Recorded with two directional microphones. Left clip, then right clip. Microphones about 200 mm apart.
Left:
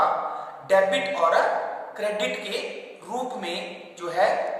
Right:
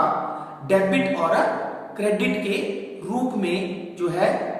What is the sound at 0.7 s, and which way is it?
A woman's voice, 15° left (ahead or behind).